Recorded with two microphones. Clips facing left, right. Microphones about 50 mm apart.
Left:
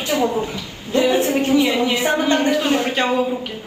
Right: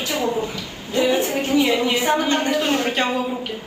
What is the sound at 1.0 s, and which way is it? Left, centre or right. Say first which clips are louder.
Speech: left 3 dB; centre.